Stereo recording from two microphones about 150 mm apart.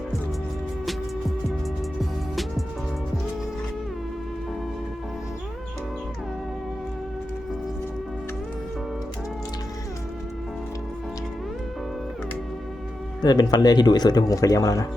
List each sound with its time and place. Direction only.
2.0 s music: centre (ahead or behind)
13.2 s speech: 25° left (ahead or behind)